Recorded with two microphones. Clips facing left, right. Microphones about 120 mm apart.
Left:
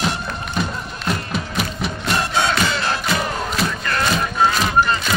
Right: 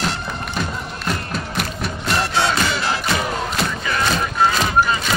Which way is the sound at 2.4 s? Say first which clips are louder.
Even; 10° right (ahead or behind).